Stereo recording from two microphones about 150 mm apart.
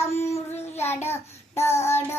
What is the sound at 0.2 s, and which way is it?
Child singing, 15° left (ahead or behind).